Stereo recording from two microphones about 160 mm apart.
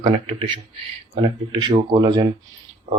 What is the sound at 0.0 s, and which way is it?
Speech, 30° right (ahead or behind).